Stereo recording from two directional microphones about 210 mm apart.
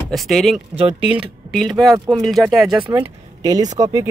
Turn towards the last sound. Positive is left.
turn(degrees=-15)  # may be behind; listen again after turning